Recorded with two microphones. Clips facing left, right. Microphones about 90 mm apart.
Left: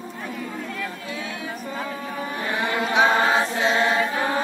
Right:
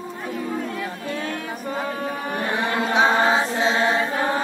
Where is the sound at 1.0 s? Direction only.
55° right (ahead or behind).